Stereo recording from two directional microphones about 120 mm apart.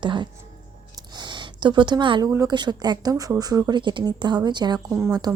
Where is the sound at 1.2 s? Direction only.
40° right (ahead or behind).